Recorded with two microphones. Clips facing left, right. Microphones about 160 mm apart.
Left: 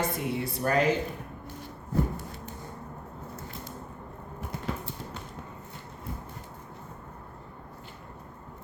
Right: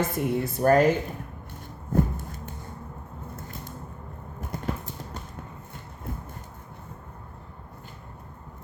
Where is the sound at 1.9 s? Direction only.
45° right (ahead or behind).